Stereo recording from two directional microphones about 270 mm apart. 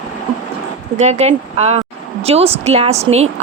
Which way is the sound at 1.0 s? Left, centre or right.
Right.